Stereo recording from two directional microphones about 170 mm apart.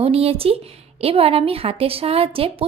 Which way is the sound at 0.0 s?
35° right (ahead or behind).